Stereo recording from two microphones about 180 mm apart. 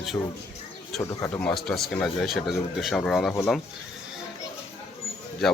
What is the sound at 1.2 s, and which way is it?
Speech, 5° left (ahead or behind).